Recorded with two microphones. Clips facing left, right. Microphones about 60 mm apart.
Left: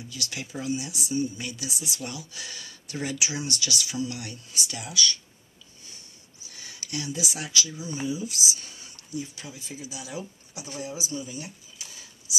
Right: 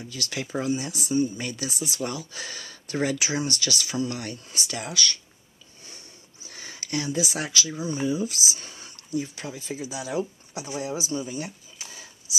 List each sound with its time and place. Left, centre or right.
0.0 s speech: right
0.7 s speech: right
6.4 s speech: right